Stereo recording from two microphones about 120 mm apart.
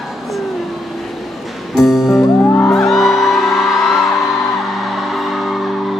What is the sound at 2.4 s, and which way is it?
Music, 20° left (ahead or behind).